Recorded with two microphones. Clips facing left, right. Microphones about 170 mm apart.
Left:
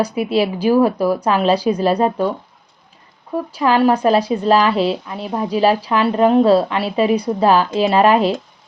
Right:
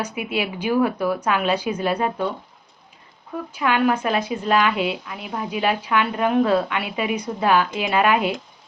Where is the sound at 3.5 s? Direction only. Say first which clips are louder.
Left 5 dB; 35° left (ahead or behind).